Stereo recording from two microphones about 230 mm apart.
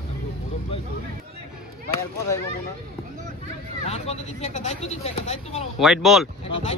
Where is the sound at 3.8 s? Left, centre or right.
Left.